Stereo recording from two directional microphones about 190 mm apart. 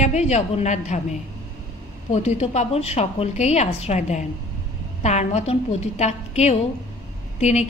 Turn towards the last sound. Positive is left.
turn(degrees=35)  # may be behind; listen again after turning